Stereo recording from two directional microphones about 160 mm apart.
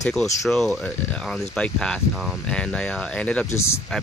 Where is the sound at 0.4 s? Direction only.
Centre (ahead or behind).